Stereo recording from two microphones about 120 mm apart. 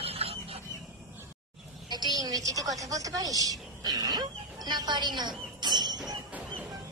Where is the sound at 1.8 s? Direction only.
35° right (ahead or behind).